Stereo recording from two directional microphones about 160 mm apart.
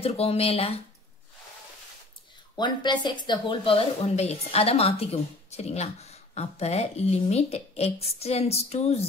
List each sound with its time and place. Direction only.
0.0 s speech: 40° left (ahead or behind)
2.5 s speech: 30° left (ahead or behind)